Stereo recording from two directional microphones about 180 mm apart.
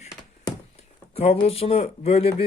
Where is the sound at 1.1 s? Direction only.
35° left (ahead or behind).